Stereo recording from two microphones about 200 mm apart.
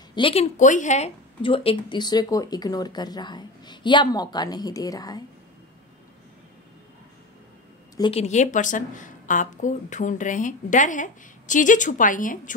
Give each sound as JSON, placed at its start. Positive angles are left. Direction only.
{"t": 0.1, "sound": "speech", "side_deg": 25}
{"t": 8.0, "sound": "a woman's voice", "side_deg": 30}